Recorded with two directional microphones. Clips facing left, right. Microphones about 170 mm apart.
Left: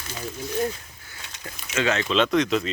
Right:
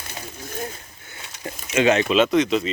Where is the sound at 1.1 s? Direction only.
25° right (ahead or behind).